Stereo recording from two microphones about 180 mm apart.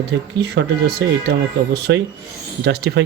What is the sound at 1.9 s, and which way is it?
Speech, 90° right.